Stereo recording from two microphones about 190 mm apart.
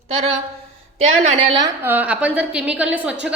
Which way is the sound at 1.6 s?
10° right (ahead or behind).